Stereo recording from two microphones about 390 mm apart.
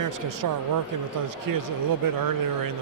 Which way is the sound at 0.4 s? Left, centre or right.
Right.